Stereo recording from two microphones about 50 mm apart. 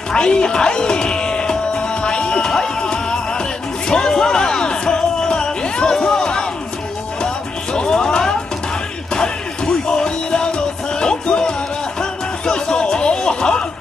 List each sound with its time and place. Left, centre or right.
0.1 s music: centre
7.7 s music: centre